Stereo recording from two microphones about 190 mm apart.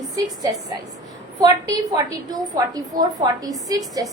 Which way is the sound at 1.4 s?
20° right (ahead or behind).